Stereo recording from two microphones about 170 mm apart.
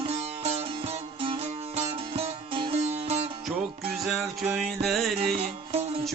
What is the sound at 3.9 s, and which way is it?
Music, centre (ahead or behind).